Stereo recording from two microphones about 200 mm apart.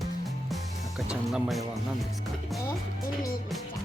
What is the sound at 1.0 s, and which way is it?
Music, centre (ahead or behind).